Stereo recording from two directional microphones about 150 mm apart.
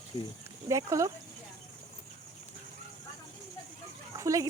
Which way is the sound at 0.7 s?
20° right (ahead or behind).